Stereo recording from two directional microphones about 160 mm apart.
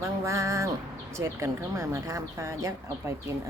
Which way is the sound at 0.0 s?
20° right (ahead or behind).